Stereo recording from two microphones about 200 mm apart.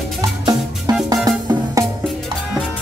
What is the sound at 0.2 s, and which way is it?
Music, 15° right (ahead or behind).